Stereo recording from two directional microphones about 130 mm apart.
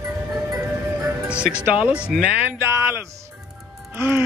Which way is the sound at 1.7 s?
10° right (ahead or behind).